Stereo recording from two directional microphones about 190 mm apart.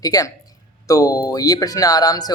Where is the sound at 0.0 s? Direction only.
20° left (ahead or behind).